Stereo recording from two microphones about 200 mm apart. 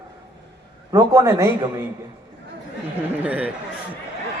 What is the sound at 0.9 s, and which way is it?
Speech, 15° right (ahead or behind).